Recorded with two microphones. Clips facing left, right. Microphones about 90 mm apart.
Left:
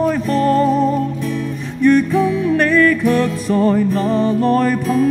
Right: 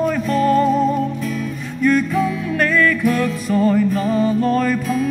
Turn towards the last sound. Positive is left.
turn(degrees=20)  # may be behind; listen again after turning